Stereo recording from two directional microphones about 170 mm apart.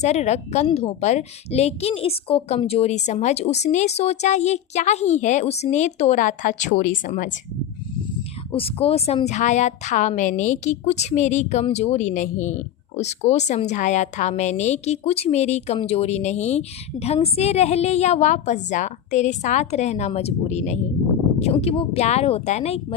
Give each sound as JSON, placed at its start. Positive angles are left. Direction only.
{"t": 0.0, "sound": "a woman's voice", "side_deg": 40}
{"t": 8.5, "sound": "a woman's voice", "side_deg": 35}